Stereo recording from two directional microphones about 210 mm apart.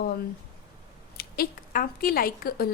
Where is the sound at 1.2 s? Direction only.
45° left (ahead or behind).